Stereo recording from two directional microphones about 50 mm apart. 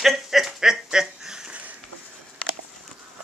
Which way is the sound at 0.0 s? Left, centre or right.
Centre.